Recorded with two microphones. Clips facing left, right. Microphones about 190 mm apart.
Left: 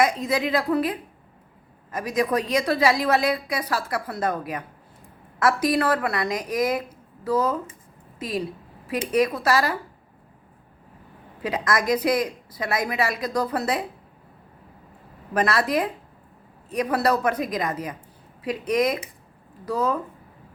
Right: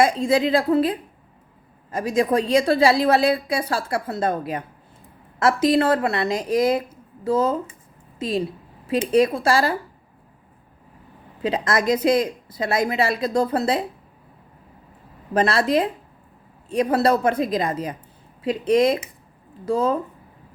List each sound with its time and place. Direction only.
0.0 s a woman's voice: 30° right (ahead or behind)
11.4 s a woman's voice: 25° right (ahead or behind)
15.3 s a woman's voice: 30° right (ahead or behind)